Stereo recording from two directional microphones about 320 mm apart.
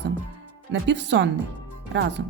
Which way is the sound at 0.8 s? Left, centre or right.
Right.